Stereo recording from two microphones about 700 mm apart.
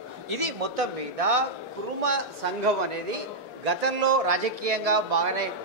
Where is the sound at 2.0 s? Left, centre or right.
Right.